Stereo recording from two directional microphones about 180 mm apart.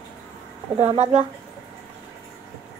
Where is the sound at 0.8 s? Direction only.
35° right (ahead or behind).